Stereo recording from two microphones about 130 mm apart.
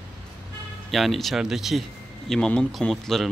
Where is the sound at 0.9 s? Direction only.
Centre (ahead or behind).